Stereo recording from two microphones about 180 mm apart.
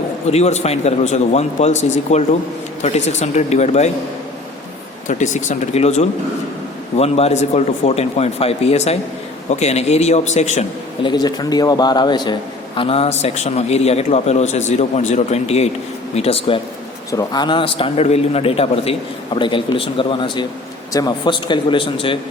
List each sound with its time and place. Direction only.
0.3 s a man's voice: 35° left (ahead or behind)
5.0 s a man's voice: 45° left (ahead or behind)
11.0 s a man's voice: 25° left (ahead or behind)
17.1 s a man's voice: 20° left (ahead or behind)